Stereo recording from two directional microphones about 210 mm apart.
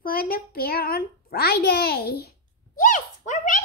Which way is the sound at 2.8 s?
40° left (ahead or behind).